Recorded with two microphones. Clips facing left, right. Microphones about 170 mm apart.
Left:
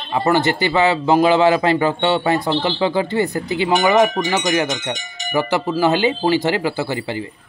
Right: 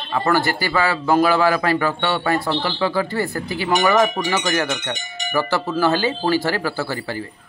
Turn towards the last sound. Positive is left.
turn(degrees=20)  # may be behind; listen again after turning